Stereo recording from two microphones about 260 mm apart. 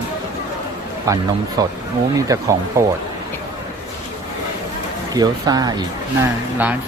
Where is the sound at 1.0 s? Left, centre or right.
Centre.